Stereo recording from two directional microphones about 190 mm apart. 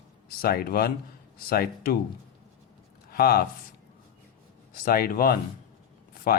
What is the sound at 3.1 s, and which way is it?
Speech, 50° left (ahead or behind).